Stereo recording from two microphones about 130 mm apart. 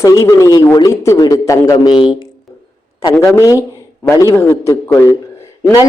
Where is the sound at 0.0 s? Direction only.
25° left (ahead or behind).